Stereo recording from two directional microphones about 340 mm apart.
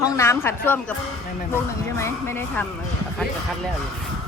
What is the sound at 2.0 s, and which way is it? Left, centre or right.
Speech, centre.